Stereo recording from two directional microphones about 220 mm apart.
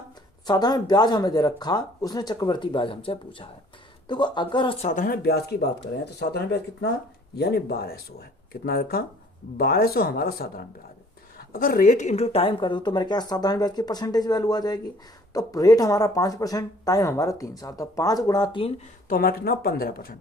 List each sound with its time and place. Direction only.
0.4 s speech: 20° left (ahead or behind)
19.0 s speech: 40° left (ahead or behind)